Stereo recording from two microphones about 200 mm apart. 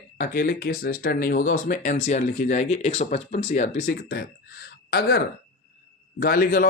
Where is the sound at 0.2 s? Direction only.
45° left (ahead or behind).